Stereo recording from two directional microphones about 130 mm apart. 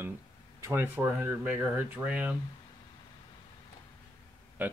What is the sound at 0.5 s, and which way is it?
Speech, 20° right (ahead or behind).